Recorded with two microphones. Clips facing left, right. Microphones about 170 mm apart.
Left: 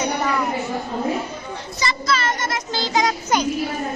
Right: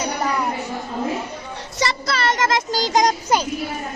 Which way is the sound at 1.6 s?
70° right (ahead or behind).